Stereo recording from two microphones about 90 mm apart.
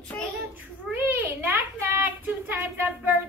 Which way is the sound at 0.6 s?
20° right (ahead or behind).